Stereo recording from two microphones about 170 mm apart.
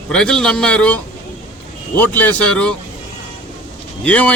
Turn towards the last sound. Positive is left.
turn(degrees=10)  # may be behind; listen again after turning